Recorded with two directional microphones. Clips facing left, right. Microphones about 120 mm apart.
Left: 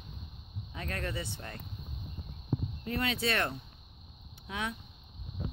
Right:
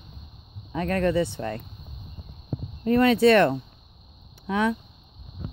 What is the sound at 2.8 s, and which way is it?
Speech, 50° right (ahead or behind).